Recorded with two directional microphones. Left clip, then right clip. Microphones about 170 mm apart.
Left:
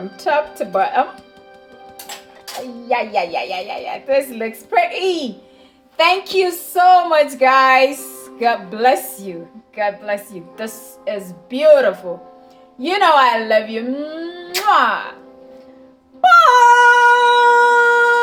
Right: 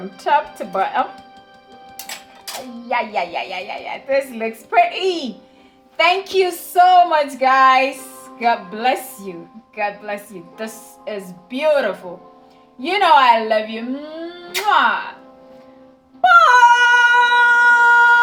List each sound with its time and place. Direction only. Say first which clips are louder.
0.2 s speech: even; 15° left (ahead or behind)
2.9 s a woman's voice: left 2 dB; 20° left (ahead or behind)
8.4 s a woman's voice: left 2 dB; 35° left (ahead or behind)
16.2 s dog: left 1 dB; 30° left (ahead or behind)